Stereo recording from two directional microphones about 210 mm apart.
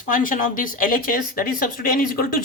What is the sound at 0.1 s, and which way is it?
Speech, 40° left (ahead or behind).